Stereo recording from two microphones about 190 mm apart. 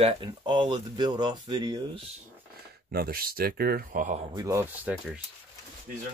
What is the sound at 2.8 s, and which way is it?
Speech, 50° right (ahead or behind).